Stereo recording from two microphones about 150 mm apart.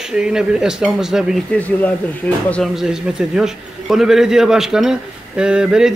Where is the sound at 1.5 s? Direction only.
10° left (ahead or behind).